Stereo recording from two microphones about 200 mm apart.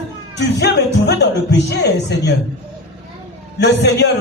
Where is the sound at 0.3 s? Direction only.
55° left (ahead or behind).